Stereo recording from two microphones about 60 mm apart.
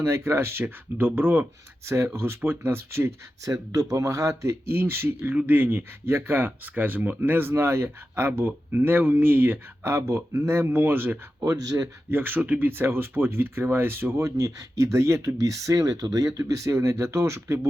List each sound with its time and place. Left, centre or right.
0.0 s speech: right
1.8 s speech: right
2.1 s speech: right
3.4 s speech: right
4.6 s speech: right
11.4 s speech: right
12.1 s speech: right
14.2 s speech: right